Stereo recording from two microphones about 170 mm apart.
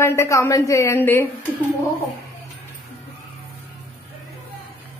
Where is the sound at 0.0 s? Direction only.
15° left (ahead or behind).